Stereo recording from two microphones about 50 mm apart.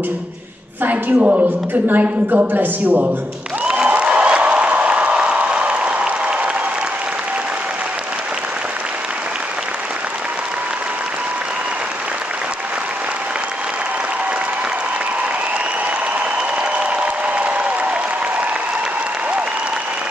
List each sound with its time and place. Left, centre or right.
0.8 s a woman's voice: right
3.6 s applause: centre
16.9 s applause: right